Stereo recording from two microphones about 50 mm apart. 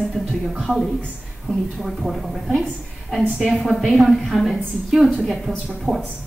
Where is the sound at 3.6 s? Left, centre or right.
Centre.